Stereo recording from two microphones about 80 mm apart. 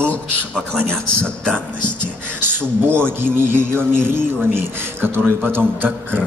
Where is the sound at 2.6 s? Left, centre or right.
Right.